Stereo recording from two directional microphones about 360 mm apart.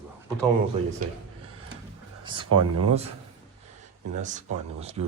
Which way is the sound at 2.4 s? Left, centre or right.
Right.